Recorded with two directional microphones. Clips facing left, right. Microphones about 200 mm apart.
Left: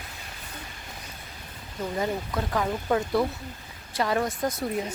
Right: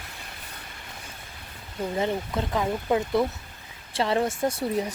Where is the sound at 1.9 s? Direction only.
20° right (ahead or behind).